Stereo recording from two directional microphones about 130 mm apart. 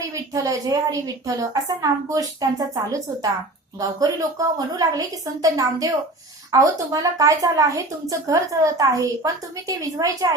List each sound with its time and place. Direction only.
0.3 s a woman's voice: 25° right (ahead or behind)